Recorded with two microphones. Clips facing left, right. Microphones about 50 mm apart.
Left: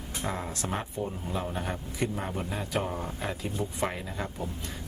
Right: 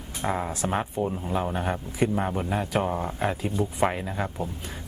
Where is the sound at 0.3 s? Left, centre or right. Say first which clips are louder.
Right 7 dB; right.